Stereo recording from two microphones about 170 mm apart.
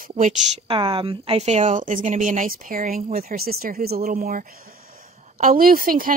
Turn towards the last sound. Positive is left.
turn(degrees=-55)  # may be behind; listen again after turning